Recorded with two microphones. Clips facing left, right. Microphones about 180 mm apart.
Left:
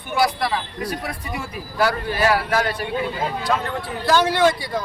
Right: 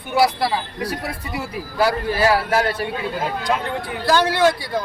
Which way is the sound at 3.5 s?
15° right (ahead or behind).